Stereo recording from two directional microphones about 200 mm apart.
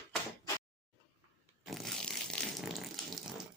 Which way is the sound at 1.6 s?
Centre (ahead or behind).